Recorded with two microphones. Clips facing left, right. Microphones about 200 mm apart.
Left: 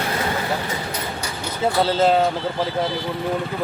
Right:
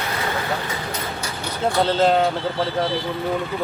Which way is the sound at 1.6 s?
5° left (ahead or behind).